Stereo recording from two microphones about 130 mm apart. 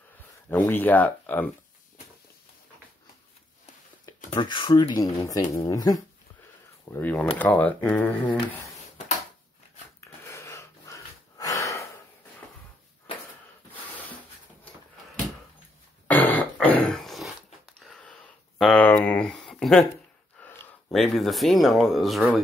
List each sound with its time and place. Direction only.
0.5 s speech: 15° left (ahead or behind)
4.4 s speech: 35° left (ahead or behind)
6.9 s speech: 15° left (ahead or behind)
9.9 s wheeze: 20° left (ahead or behind)
16.1 s music: 15° left (ahead or behind)
17.7 s sniff: 5° left (ahead or behind)
18.6 s a sound: centre (ahead or behind)
20.9 s speech: centre (ahead or behind)